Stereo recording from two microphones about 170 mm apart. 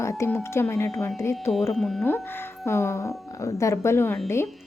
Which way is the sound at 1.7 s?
5° left (ahead or behind).